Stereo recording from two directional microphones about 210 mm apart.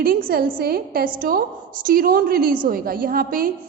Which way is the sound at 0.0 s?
45° right (ahead or behind).